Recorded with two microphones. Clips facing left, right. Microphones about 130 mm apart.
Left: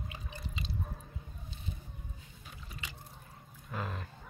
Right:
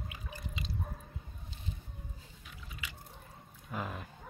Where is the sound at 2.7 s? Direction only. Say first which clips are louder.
Even; 35° left (ahead or behind).